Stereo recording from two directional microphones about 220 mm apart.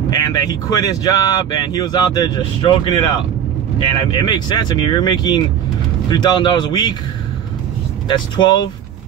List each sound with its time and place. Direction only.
0.1 s speech: 20° left (ahead or behind)
8.1 s speech: 20° left (ahead or behind)